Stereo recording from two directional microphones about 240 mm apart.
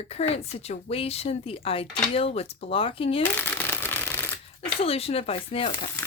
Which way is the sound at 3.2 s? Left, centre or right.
Centre.